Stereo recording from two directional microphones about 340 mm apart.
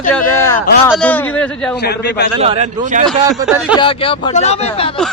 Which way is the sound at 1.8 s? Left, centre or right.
Left.